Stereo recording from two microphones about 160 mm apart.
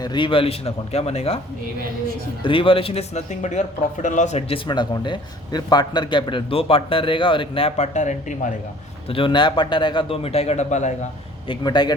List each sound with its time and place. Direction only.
0.0 s a man's voice: 30° left (ahead or behind)
2.4 s a man's voice: 30° left (ahead or behind); by 8.5 s 50° left (ahead or behind)
9.0 s a man's voice: 35° left (ahead or behind)
11.4 s a man's voice: 25° left (ahead or behind)